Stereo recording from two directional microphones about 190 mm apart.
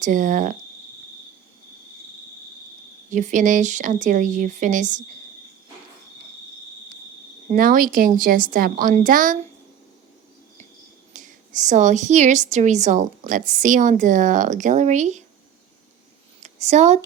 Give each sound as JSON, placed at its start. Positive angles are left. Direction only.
{"t": 0.0, "sound": "a woman's voice", "side_deg": -45}
{"t": 3.1, "sound": "a woman's voice", "side_deg": -40}
{"t": 7.5, "sound": "a woman's voice", "side_deg": -50}
{"t": 11.1, "sound": "a woman's voice", "side_deg": -40}
{"t": 16.4, "sound": "speech", "side_deg": -35}